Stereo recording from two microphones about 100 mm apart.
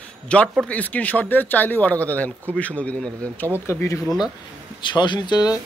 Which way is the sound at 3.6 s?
30° left (ahead or behind).